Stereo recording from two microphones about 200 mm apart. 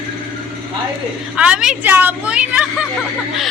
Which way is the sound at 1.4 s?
5° right (ahead or behind).